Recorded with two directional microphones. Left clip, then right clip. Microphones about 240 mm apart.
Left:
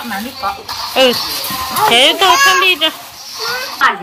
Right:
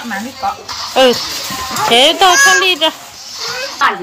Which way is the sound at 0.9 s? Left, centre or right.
Centre.